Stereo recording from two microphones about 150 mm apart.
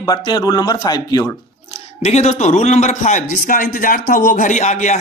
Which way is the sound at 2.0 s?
45° left (ahead or behind).